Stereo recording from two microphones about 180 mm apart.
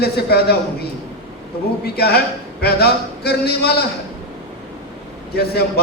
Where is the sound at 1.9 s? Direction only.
65° left (ahead or behind).